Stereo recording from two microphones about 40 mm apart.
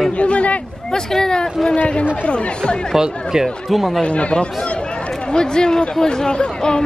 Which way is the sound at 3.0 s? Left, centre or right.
Centre.